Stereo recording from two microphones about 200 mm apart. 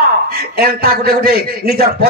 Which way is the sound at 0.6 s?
50° right (ahead or behind).